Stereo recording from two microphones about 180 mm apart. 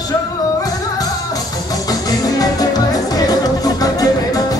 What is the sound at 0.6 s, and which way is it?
Music, 20° left (ahead or behind).